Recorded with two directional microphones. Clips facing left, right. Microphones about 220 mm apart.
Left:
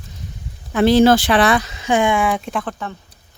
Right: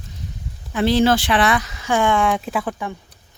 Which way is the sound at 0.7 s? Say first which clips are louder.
Left 4 dB; 50° left (ahead or behind).